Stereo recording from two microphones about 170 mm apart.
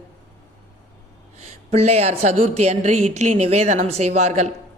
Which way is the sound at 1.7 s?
40° right (ahead or behind).